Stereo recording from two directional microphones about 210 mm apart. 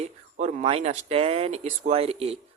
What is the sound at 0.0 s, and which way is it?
Speech, 35° right (ahead or behind).